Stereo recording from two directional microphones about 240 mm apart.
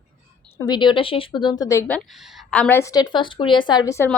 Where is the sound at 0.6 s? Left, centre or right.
Centre.